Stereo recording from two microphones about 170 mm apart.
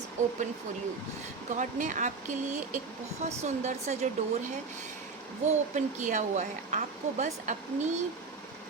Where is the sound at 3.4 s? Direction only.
40° right (ahead or behind).